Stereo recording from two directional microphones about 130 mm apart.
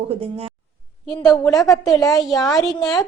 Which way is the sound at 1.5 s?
25° left (ahead or behind).